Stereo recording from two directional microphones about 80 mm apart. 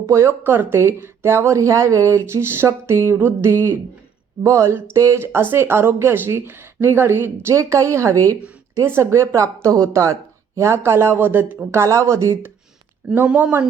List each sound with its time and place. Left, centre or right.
0.0 s speech: right
8.9 s speech: right
13.2 s speech: centre